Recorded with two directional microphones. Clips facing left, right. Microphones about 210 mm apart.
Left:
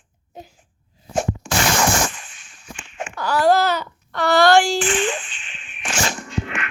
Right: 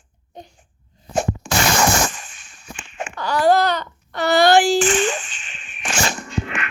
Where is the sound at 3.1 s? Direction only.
5° left (ahead or behind).